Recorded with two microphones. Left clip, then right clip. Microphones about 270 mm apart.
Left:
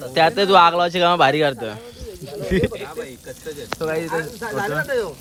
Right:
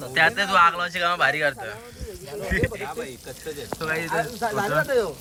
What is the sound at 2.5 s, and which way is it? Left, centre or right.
Speech, centre.